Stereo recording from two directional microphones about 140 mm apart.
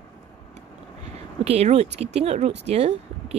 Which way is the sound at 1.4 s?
50° right (ahead or behind).